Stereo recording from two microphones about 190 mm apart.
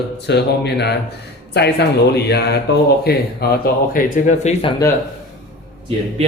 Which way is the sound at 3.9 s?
45° left (ahead or behind).